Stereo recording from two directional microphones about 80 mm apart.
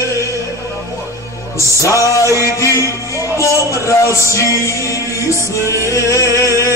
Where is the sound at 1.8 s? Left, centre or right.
Left.